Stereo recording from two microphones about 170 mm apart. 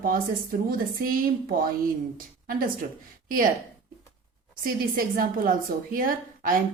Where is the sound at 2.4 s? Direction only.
55° right (ahead or behind).